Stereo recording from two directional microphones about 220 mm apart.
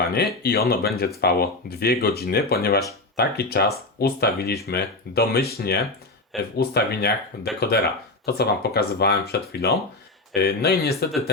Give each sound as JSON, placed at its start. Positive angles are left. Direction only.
{"t": 0.4, "sound": "speech", "side_deg": 45}